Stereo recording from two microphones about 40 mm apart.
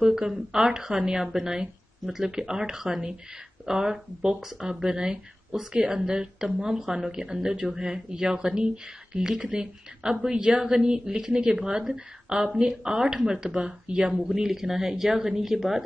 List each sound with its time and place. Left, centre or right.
0.0 s speech: centre
14.2 s speech: centre